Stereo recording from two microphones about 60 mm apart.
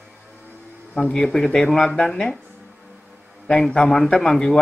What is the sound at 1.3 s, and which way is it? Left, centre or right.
Speech, centre.